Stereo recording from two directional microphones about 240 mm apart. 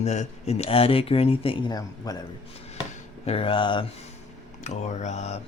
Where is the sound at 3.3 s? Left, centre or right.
Left.